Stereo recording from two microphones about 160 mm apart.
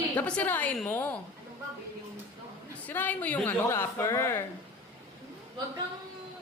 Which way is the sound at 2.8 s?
10° left (ahead or behind).